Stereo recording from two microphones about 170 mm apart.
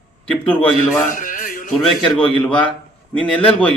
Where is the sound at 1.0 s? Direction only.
50° left (ahead or behind).